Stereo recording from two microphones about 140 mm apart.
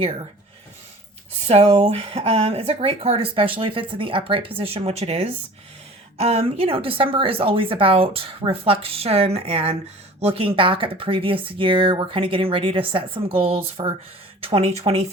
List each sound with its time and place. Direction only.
1.5 s speech: 45° right (ahead or behind)